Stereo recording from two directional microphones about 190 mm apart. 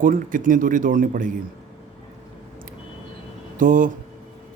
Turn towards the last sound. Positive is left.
turn(degrees=-45)  # may be behind; listen again after turning